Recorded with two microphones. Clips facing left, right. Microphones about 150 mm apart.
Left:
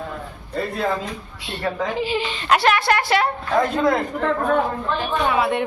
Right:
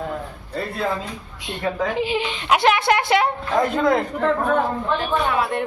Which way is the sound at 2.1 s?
15° right (ahead or behind).